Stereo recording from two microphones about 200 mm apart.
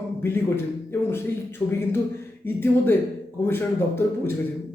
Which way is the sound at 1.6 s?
20° left (ahead or behind).